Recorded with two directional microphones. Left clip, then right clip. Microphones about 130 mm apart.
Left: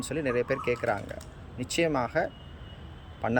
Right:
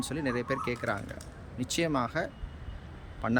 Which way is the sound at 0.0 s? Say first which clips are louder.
Left 4 dB; 15° right (ahead or behind).